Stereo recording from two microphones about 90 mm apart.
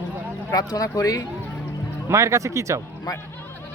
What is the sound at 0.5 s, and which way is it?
Speech, 40° left (ahead or behind).